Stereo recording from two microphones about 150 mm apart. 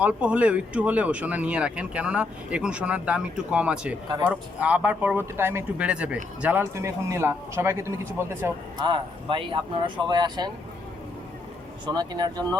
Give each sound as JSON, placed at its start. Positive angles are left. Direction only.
{"t": 0.0, "sound": "speech", "side_deg": -10}
{"t": 8.8, "sound": "speech", "side_deg": -35}
{"t": 11.9, "sound": "speech", "side_deg": -25}